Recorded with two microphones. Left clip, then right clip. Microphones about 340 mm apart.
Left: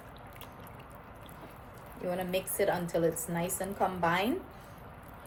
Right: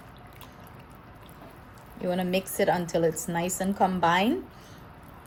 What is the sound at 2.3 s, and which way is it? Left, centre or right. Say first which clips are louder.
A woman's voice: right 5 dB; right.